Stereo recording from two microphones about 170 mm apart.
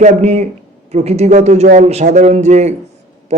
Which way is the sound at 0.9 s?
40° right (ahead or behind).